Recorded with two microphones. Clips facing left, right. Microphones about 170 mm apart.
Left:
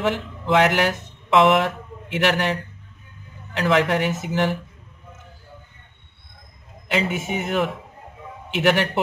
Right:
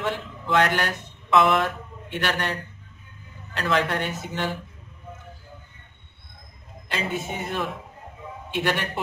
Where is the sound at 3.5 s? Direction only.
90° left.